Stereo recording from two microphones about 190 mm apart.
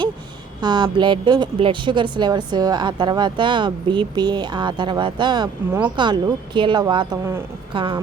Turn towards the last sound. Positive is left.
turn(degrees=-25)  # may be behind; listen again after turning